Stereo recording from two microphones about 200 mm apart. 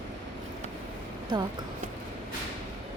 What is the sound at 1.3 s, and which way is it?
Speech, 20° right (ahead or behind).